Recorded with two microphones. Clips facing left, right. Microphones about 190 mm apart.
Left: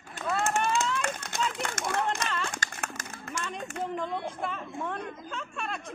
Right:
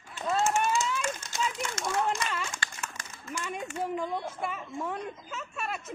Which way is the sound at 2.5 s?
55° left (ahead or behind).